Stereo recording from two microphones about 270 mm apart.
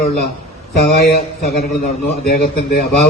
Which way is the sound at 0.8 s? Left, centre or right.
Left.